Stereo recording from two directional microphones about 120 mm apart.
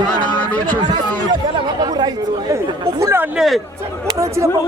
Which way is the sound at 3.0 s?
25° right (ahead or behind).